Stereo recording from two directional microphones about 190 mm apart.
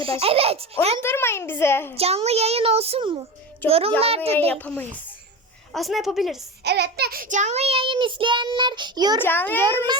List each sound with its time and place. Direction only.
0.0 s child singing: 30° right (ahead or behind)
1.0 s a child's voice: 10° left (ahead or behind)
2.0 s child singing: 30° right (ahead or behind)
4.4 s a child's voice: 10° left (ahead or behind)
6.7 s child singing: 60° right (ahead or behind); by 9.2 s 20° right (ahead or behind)
9.2 s a child's voice: 10° left (ahead or behind)
9.6 s child singing: 20° right (ahead or behind)